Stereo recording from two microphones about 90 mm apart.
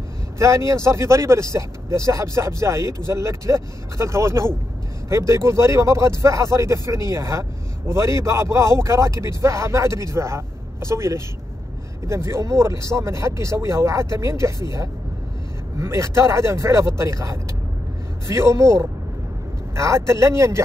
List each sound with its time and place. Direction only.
0.4 s speech: 35° right (ahead or behind)
15.8 s speech: 30° right (ahead or behind)